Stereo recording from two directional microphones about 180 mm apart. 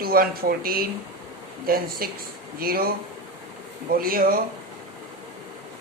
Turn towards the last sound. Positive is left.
turn(degrees=-55)  # may be behind; listen again after turning